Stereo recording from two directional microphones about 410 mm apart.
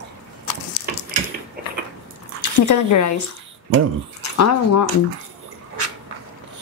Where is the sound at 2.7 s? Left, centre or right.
Left.